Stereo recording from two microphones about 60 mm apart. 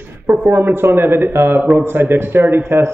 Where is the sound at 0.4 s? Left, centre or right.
Right.